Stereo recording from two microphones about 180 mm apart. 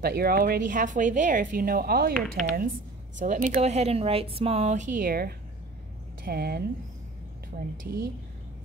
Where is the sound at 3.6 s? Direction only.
35° right (ahead or behind); by 6.6 s 60° right (ahead or behind).